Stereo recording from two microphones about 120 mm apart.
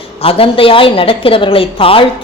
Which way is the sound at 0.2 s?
50° left (ahead or behind).